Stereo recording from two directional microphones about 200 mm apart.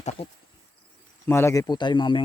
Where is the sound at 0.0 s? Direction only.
35° left (ahead or behind).